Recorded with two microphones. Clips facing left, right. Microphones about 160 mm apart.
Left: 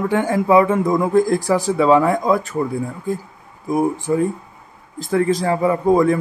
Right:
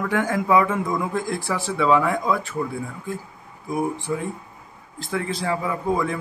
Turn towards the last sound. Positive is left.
turn(degrees=40)  # may be behind; listen again after turning